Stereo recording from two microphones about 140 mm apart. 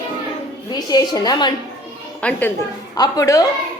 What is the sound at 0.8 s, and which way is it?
Speech, 25° left (ahead or behind).